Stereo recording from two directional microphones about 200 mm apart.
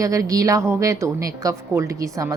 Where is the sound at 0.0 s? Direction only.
15° right (ahead or behind).